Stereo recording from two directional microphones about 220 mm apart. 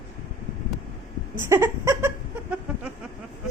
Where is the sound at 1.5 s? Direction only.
10° right (ahead or behind).